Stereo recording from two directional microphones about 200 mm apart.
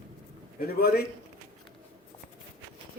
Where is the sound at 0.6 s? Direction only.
50° left (ahead or behind).